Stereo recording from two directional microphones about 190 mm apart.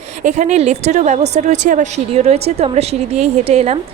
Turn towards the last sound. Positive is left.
turn(degrees=-35)  # may be behind; listen again after turning